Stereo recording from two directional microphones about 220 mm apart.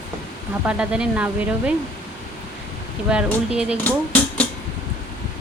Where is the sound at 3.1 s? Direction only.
5° right (ahead or behind).